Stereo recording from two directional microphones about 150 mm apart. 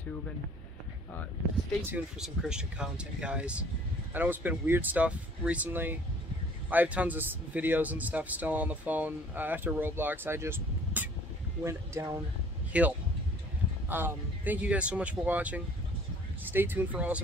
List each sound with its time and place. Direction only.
2.1 s a man's voice: 5° right (ahead or behind)
12.7 s a man's voice: 10° right (ahead or behind)